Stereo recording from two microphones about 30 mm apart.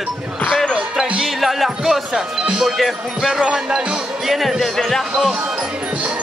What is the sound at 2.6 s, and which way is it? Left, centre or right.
Speech, centre.